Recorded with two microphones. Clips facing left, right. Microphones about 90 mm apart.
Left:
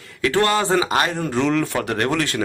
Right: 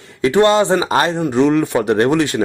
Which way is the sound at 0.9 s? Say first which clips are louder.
Right 5 dB; 30° right (ahead or behind).